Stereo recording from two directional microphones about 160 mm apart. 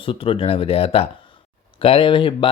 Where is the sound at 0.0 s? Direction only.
35° left (ahead or behind).